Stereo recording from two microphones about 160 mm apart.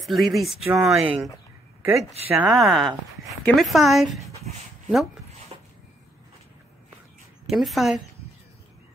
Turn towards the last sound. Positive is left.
turn(degrees=0)  # may be behind; listen again after turning